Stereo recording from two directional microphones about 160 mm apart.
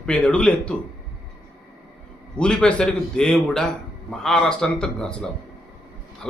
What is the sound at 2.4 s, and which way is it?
A man's voice, 5° left (ahead or behind).